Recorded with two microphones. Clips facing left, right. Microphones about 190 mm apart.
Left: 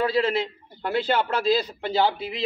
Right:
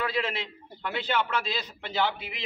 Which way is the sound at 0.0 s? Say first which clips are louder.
Left 8 dB; 35° left (ahead or behind).